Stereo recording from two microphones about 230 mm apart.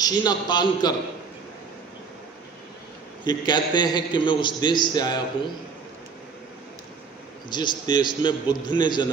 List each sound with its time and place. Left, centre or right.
0.0 s a man's voice: centre
3.3 s a man's voice: centre
7.4 s a man's voice: centre